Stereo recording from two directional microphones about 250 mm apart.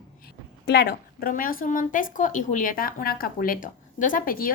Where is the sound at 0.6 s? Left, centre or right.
Left.